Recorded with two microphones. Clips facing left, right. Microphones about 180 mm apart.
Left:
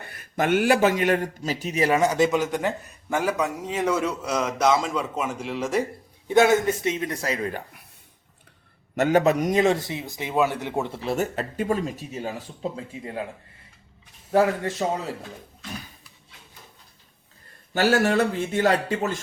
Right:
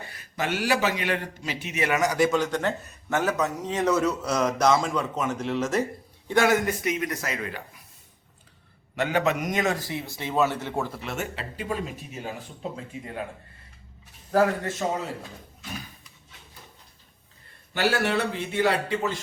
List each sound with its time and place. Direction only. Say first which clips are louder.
0.0 s a man's voice: left 5 dB; 55° left (ahead or behind); by 2.4 s 20° left (ahead or behind)
2.5 s a man's voice: left 1 dB; 10° left (ahead or behind)
6.2 s a man's voice: left 4 dB; 20° left (ahead or behind)
7.5 s speech: left 4 dB; 60° left (ahead or behind)
9.0 s a man's voice: left 5 dB; 45° left (ahead or behind)
17.7 s a man's voice: left 4 dB; 45° left (ahead or behind)